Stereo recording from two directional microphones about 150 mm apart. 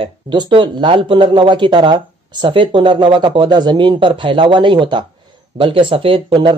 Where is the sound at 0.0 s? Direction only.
35° right (ahead or behind).